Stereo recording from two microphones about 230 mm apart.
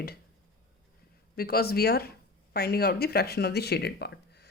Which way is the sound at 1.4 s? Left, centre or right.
Left.